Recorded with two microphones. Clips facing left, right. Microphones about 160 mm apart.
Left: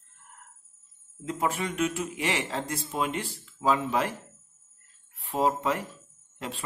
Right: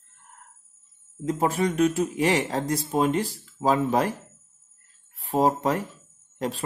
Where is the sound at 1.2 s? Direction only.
40° right (ahead or behind).